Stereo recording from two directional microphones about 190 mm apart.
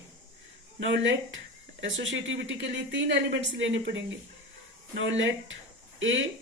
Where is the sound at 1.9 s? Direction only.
80° right.